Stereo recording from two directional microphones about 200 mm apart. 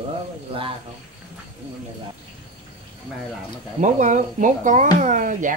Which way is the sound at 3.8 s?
40° right (ahead or behind).